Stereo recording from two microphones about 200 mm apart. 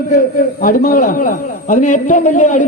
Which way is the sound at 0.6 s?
45° left (ahead or behind).